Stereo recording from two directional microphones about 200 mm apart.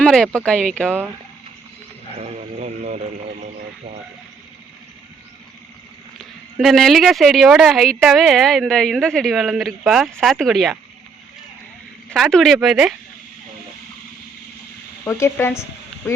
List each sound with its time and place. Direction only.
0.0 s speech: 5° left (ahead or behind)
2.1 s radio: 35° right (ahead or behind)
6.1 s speech: centre (ahead or behind)
12.1 s speech: centre (ahead or behind)
15.0 s speech: 15° left (ahead or behind)